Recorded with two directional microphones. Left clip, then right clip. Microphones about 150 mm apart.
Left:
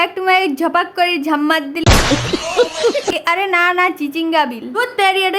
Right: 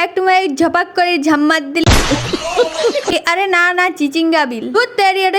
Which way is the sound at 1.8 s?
Centre (ahead or behind).